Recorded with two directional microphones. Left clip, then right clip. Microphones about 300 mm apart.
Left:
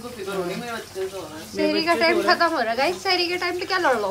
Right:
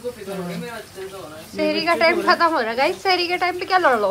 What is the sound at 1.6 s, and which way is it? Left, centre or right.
A woman's voice, centre.